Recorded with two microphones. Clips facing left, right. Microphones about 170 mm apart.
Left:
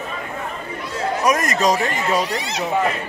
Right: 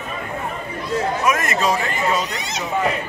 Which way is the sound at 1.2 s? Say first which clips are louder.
Left 2 dB; 40° left (ahead or behind).